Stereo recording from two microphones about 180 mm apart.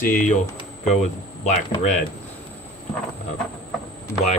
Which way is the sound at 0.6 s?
40° left (ahead or behind).